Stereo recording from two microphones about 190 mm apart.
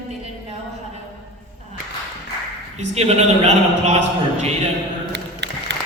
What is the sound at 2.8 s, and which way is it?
A man's voice, 35° right (ahead or behind).